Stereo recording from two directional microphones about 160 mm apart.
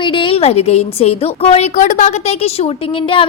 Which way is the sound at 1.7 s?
50° left (ahead or behind).